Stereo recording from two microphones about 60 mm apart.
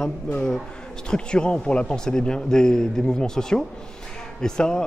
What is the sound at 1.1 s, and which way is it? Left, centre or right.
A man's voice, centre.